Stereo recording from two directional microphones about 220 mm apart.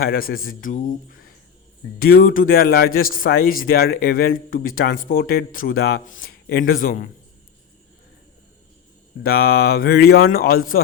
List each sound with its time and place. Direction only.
0.0 s a man's voice: 40° left (ahead or behind)
2.0 s a man's voice: 40° left (ahead or behind)
9.2 s speech: 45° left (ahead or behind)